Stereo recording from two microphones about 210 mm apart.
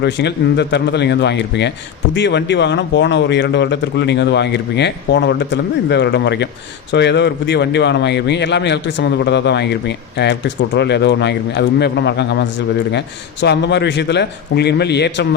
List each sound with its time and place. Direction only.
0.0 s a man's voice: 55° left (ahead or behind)